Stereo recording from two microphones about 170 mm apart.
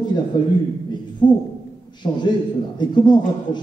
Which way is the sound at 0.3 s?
25° left (ahead or behind).